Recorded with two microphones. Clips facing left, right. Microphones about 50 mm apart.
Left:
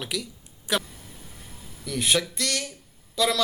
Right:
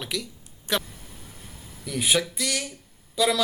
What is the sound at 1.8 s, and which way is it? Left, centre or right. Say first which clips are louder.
Speech: even; centre.